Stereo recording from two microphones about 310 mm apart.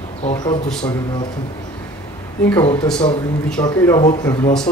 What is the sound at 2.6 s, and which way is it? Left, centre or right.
A man's voice, centre.